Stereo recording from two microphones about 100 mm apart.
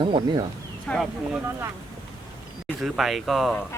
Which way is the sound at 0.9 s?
10° left (ahead or behind).